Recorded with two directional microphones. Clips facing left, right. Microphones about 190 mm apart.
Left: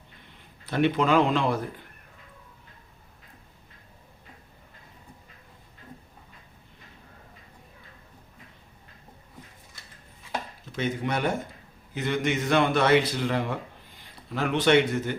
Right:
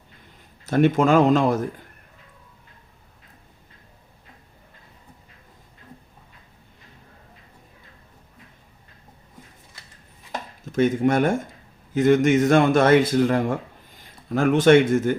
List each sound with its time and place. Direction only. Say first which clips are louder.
0.6 s a man's voice: right 6 dB; 45° right (ahead or behind)
10.6 s a man's voice: right 11 dB; 50° right (ahead or behind)